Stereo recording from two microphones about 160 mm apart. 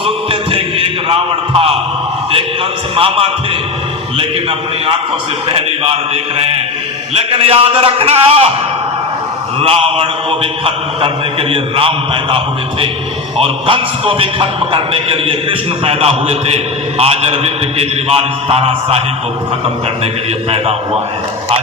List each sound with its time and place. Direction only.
0.0 s a sound: 35° right (ahead or behind)
2.9 s a man's voice: 35° right (ahead or behind)
5.5 s a man's voice: 40° right (ahead or behind)
9.6 s a man's voice: 35° right (ahead or behind)